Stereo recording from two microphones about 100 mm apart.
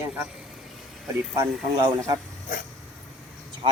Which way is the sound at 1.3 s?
40° right (ahead or behind).